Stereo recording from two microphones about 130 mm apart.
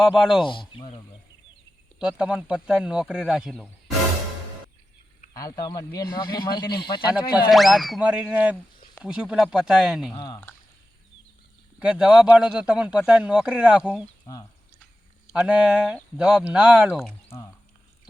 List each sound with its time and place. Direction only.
0.0 s speech: 5° right (ahead or behind)
0.4 s speech: 40° left (ahead or behind)
2.0 s speech: 5° right (ahead or behind)
5.3 s speech: 30° left (ahead or behind)
7.5 s speech: centre (ahead or behind)
10.2 s speech: 30° left (ahead or behind)
11.8 s speech: 5° right (ahead or behind)
15.3 s speech: 10° right (ahead or behind)